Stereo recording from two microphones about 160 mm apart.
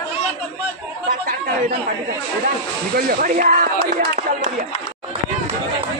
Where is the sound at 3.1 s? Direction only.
60° right (ahead or behind).